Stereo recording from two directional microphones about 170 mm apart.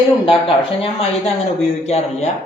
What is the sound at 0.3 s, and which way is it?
Speech, 30° left (ahead or behind).